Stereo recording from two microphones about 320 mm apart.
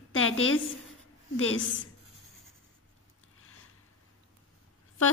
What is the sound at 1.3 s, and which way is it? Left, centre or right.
Speech, left.